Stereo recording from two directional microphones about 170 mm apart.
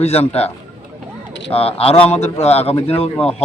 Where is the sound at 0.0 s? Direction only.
35° left (ahead or behind).